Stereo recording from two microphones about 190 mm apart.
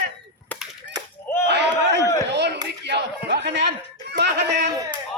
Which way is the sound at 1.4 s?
65° right (ahead or behind).